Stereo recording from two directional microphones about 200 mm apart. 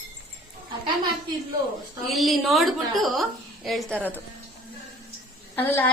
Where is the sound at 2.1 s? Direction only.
Centre (ahead or behind).